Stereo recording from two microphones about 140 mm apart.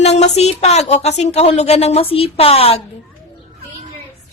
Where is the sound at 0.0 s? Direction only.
50° left (ahead or behind).